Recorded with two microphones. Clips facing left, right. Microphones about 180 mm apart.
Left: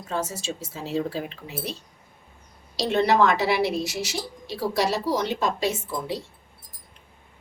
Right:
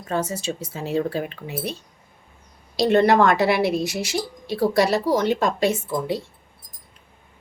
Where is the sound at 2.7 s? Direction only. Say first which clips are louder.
Right 4 dB; 55° right (ahead or behind).